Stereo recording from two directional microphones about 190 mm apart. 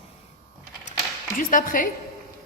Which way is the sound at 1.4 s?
45° left (ahead or behind).